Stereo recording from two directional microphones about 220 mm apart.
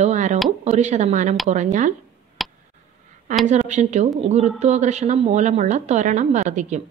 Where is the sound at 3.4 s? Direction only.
30° right (ahead or behind).